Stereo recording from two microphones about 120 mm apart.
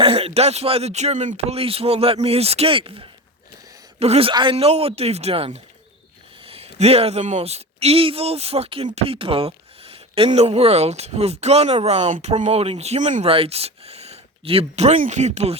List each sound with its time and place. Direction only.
0.0 s speech: 55° right (ahead or behind)
4.5 s speech: 60° right (ahead or behind); by 13.2 s 85° right
13.2 s speech: 50° right (ahead or behind); by 15.5 s 70° right (ahead or behind)